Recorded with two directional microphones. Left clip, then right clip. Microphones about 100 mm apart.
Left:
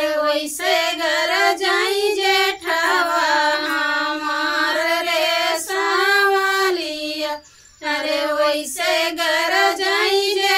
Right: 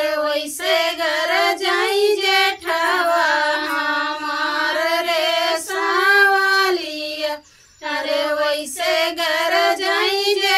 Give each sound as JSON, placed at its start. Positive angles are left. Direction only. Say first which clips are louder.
{"t": 0.0, "sound": "child singing", "louder": "left 1 dB", "side_deg": -15}
{"t": 3.3, "sound": "music", "louder": "left 1 dB", "side_deg": -15}
{"t": 4.8, "sound": "child singing", "louder": "even", "side_deg": -15}
{"t": 8.8, "sound": "child singing", "louder": "even", "side_deg": -15}